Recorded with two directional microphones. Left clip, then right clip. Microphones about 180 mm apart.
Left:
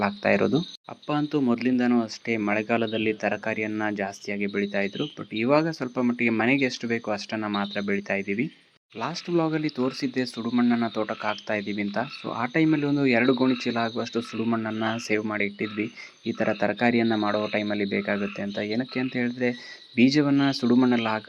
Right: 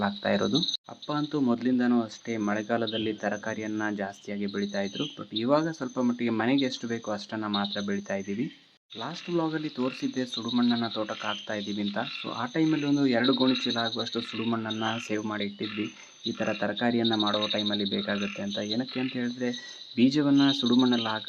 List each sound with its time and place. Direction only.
0.0 s speech: 10° left (ahead or behind)